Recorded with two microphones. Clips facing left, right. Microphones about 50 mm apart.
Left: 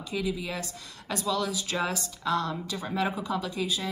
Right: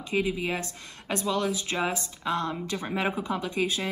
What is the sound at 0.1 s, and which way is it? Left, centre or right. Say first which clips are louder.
A woman's voice: right 4 dB; right.